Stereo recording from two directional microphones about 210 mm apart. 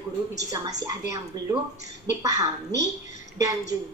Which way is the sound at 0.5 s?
15° right (ahead or behind).